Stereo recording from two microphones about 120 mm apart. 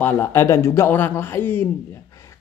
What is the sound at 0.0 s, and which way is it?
Speech, 20° left (ahead or behind).